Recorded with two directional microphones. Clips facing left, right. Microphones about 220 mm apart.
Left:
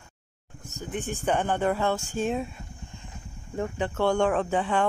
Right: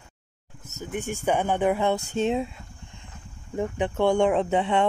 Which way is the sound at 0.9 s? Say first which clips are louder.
Right 2 dB; 10° right (ahead or behind).